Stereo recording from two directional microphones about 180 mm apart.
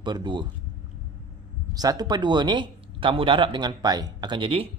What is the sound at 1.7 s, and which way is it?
Speech, 20° right (ahead or behind).